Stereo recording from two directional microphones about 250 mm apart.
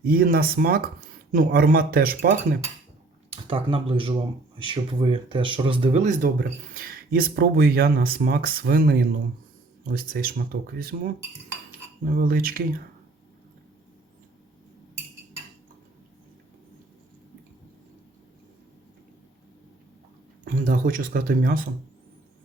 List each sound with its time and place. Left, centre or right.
0.0 s speech: right
3.2 s speech: right
12.0 s speech: right
20.4 s speech: right